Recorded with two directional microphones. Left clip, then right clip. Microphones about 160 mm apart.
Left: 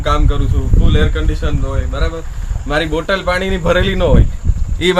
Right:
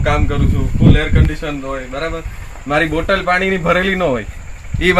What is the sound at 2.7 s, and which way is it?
Speech, 10° left (ahead or behind).